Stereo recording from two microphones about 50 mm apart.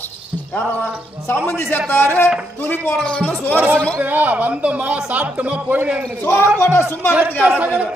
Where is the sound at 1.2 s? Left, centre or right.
Left.